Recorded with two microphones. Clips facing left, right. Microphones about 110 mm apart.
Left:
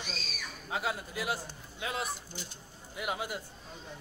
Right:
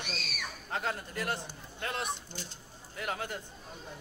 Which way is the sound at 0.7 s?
5° left (ahead or behind).